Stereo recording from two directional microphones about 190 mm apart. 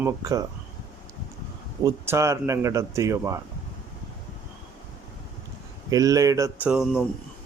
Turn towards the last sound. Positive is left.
turn(degrees=-5)  # may be behind; listen again after turning